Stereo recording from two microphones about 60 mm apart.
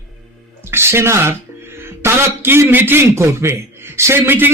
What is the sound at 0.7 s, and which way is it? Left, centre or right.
A man's voice, right.